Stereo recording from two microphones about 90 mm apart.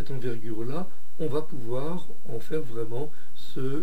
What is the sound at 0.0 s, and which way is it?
Speech, 10° right (ahead or behind).